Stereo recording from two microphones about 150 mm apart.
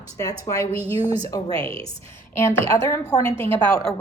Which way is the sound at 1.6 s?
35° right (ahead or behind).